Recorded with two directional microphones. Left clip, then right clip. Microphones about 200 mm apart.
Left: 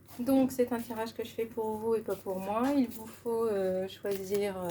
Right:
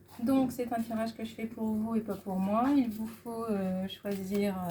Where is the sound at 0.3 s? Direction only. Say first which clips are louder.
Left 2 dB; 50° left (ahead or behind).